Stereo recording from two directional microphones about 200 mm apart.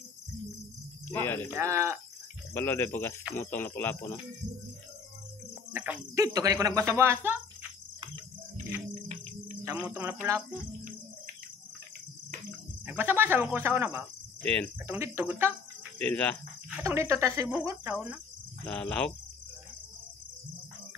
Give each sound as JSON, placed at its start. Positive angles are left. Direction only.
{"t": 1.0, "sound": "speech", "side_deg": 10}
{"t": 1.5, "sound": "speech", "side_deg": -15}
{"t": 2.5, "sound": "speech", "side_deg": 10}
{"t": 5.7, "sound": "speech", "side_deg": -10}
{"t": 9.6, "sound": "cricket", "side_deg": -10}
{"t": 10.2, "sound": "speech", "side_deg": -15}
{"t": 12.8, "sound": "speech", "side_deg": -10}
{"t": 14.4, "sound": "speech", "side_deg": 10}
{"t": 14.9, "sound": "speech", "side_deg": -10}
{"t": 16.0, "sound": "speech", "side_deg": 10}
{"t": 16.8, "sound": "speech", "side_deg": -15}
{"t": 18.7, "sound": "speech", "side_deg": 5}